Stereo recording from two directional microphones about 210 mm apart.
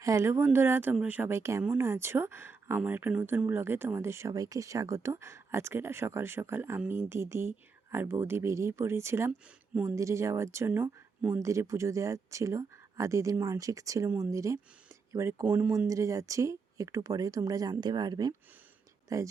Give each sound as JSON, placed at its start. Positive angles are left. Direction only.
{"t": 0.0, "sound": "speech", "side_deg": -15}